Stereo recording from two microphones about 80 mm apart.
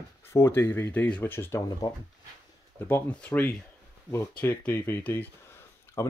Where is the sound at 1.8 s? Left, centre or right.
Left.